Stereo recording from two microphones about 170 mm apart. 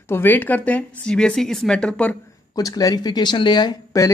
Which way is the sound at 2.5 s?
20° left (ahead or behind).